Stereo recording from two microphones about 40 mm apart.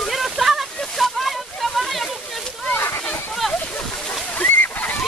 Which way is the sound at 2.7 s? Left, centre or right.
Left.